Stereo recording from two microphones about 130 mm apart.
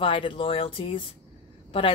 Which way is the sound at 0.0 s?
40° left (ahead or behind).